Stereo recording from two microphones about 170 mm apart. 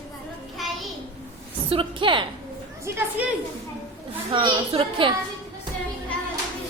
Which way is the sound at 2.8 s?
15° right (ahead or behind).